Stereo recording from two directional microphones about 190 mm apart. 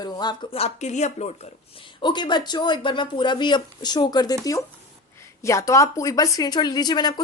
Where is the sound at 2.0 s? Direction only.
25° left (ahead or behind).